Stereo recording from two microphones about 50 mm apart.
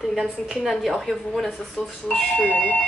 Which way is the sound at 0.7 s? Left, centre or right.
Centre.